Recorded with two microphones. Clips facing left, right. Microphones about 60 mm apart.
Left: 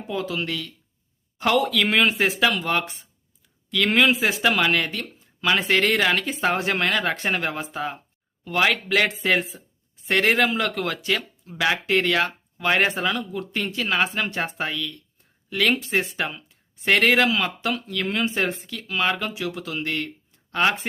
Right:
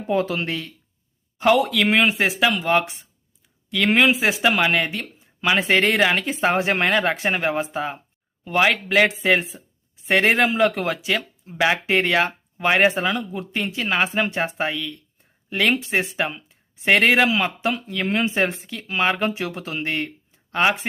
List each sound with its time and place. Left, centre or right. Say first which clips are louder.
0.1 s speech: right 5 dB; right
1.4 s speech: right 3 dB; centre
7.1 s speech: right 3 dB; centre
20.5 s speech: right 2 dB; centre